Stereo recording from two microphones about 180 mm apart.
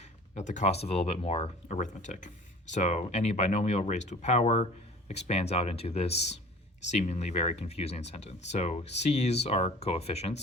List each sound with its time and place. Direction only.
0.0 s speech: 40° left (ahead or behind)